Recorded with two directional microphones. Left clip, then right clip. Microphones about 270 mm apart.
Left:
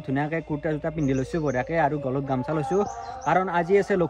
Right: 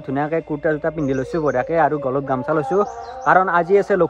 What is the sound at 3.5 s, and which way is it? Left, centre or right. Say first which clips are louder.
Speech: right 6 dB; centre.